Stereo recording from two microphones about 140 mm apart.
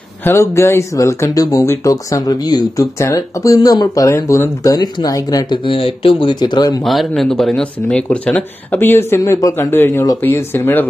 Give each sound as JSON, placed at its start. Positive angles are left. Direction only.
{"t": 0.2, "sound": "speech", "side_deg": 20}
{"t": 5.7, "sound": "speech", "side_deg": 40}
{"t": 6.8, "sound": "speech", "side_deg": 0}